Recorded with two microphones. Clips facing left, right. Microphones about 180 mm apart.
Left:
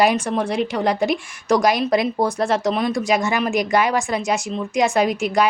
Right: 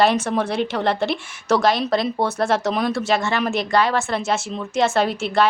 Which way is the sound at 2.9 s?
15° left (ahead or behind).